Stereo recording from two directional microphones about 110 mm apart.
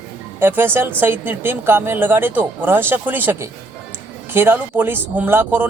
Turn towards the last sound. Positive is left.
turn(degrees=-15)  # may be behind; listen again after turning